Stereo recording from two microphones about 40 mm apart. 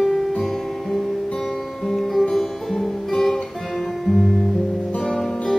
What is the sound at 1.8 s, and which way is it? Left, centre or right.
Music, centre.